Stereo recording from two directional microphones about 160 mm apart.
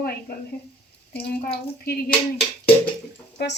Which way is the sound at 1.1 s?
85° left.